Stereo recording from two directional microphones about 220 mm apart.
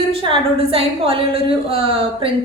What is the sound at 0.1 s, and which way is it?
A woman's voice, 25° right (ahead or behind).